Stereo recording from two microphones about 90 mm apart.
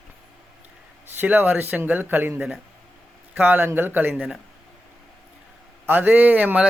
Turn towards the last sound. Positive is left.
turn(degrees=-15)  # may be behind; listen again after turning